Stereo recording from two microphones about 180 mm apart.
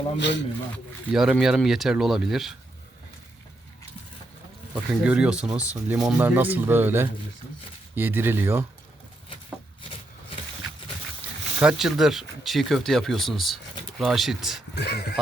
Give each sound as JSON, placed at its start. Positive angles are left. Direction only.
{"t": 0.2, "sound": "speech", "side_deg": 75}
{"t": 1.1, "sound": "speech", "side_deg": -5}
{"t": 4.7, "sound": "speech", "side_deg": -5}
{"t": 11.6, "sound": "speech", "side_deg": 0}
{"t": 14.8, "sound": "speech", "side_deg": 65}